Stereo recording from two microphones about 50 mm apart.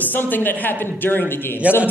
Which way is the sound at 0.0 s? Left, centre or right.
Left.